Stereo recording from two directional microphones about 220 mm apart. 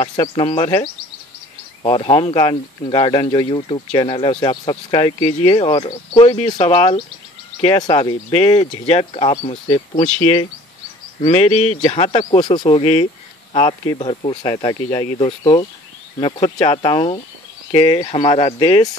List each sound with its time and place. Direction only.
0.0 s speech: 20° left (ahead or behind)
11.1 s speech: 30° left (ahead or behind)